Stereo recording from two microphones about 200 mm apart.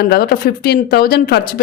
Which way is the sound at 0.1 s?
50° left (ahead or behind).